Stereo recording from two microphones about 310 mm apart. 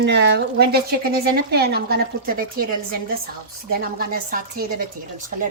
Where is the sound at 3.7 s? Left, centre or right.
Right.